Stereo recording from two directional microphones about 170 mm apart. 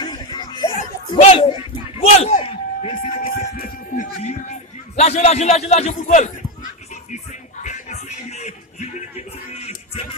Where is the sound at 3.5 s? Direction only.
55° left (ahead or behind).